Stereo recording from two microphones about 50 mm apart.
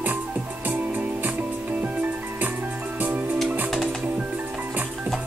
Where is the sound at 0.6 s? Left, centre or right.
Right.